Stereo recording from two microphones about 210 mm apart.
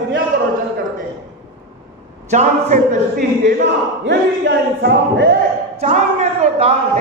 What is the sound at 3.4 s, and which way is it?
Speech, 55° right (ahead or behind).